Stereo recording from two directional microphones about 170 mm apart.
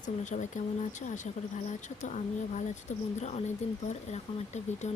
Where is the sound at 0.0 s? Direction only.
45° left (ahead or behind).